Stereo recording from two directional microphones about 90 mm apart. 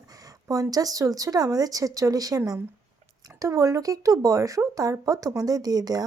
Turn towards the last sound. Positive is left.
turn(degrees=-45)  # may be behind; listen again after turning